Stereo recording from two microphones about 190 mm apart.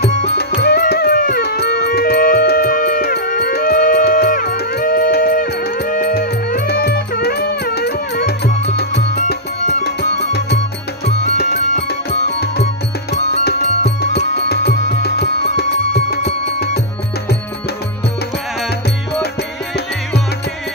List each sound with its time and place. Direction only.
0.4 s music: 60° left (ahead or behind)
11.3 s music: 55° left (ahead or behind)
13.4 s music: 60° left (ahead or behind)